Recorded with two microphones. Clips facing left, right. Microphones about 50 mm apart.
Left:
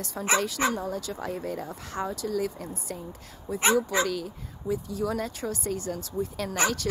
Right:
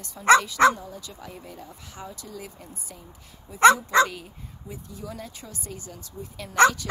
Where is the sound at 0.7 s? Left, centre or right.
Left.